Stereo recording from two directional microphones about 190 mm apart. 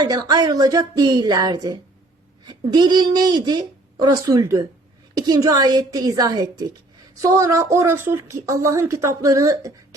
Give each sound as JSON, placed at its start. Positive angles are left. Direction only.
{"t": 0.0, "sound": "speech", "side_deg": -20}